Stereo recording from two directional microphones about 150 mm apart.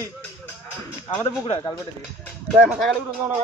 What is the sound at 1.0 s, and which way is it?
Speech, 35° left (ahead or behind).